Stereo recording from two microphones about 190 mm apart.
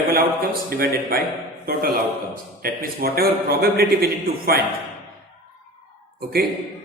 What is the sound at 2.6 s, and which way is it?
A man's voice, 50° right (ahead or behind).